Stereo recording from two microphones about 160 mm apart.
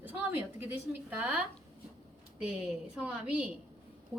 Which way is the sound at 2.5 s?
5° right (ahead or behind).